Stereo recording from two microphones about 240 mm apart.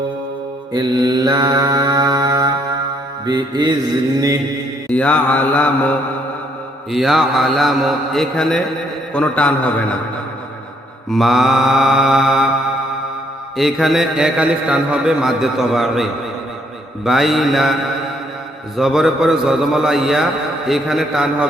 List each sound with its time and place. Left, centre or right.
0.7 s mantra: centre
4.9 s a man's voice: centre
6.9 s a man's voice: centre
11.1 s a man's voice: centre
13.6 s a man's voice: centre
18.8 s a man's voice: centre